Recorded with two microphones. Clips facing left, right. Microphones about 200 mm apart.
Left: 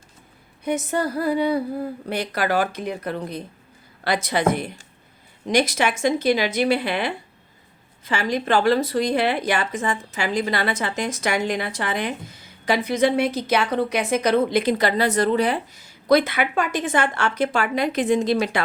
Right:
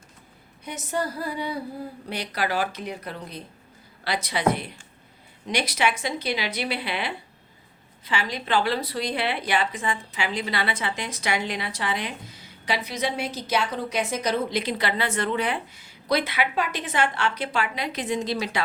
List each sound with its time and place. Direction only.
0.6 s a woman's voice: 55° left (ahead or behind)